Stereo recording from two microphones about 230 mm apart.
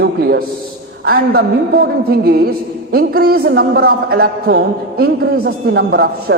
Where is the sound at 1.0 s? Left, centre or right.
Right.